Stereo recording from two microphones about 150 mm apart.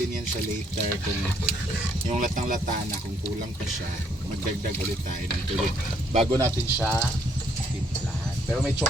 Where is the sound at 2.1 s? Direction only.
60° right (ahead or behind).